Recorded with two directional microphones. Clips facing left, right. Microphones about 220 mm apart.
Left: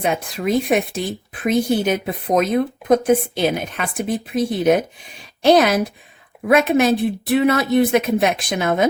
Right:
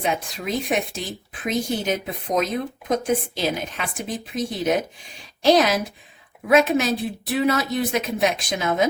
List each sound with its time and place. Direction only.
0.0 s a woman's voice: 55° left (ahead or behind)